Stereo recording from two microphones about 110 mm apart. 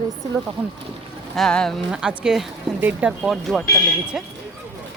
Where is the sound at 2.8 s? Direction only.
15° right (ahead or behind).